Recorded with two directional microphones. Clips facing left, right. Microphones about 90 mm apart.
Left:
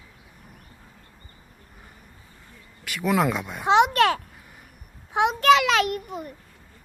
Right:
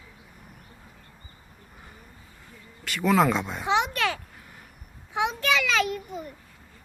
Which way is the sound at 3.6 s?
60° left (ahead or behind).